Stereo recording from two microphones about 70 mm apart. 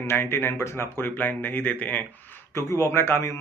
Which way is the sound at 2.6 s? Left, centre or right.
Left.